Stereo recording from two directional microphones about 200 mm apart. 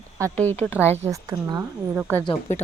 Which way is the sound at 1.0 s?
15° right (ahead or behind).